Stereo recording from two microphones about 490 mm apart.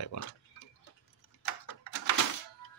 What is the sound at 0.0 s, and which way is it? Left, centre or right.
Tick-tock, left.